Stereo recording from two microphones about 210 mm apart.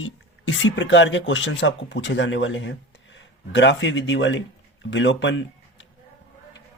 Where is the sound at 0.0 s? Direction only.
65° left (ahead or behind).